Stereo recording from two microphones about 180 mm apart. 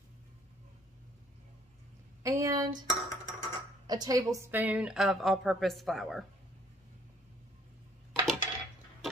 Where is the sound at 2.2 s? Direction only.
15° right (ahead or behind).